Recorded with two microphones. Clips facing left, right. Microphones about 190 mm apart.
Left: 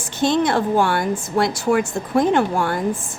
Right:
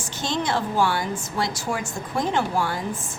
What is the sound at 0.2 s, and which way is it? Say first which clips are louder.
A woman's voice: left 8 dB; 55° left (ahead or behind).